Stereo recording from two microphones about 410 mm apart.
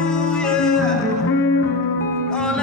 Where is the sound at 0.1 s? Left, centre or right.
Centre.